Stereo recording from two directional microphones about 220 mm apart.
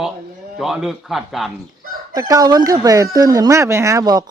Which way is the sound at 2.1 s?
15° right (ahead or behind).